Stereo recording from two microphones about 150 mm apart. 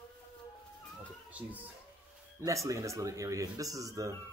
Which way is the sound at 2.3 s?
20° right (ahead or behind).